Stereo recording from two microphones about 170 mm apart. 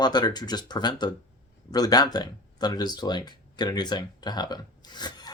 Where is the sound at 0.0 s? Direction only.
25° left (ahead or behind).